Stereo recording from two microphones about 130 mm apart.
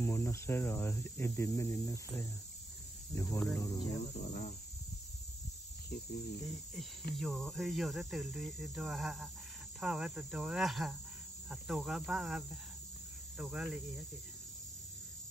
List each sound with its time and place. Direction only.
0.0 s speech: 20° left (ahead or behind)
4.3 s speech: 65° left (ahead or behind)
6.4 s cricket: centre (ahead or behind)